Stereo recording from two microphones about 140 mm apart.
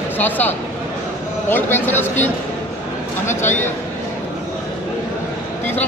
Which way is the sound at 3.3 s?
15° left (ahead or behind).